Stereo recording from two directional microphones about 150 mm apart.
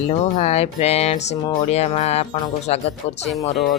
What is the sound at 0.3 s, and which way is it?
Speech, 45° left (ahead or behind).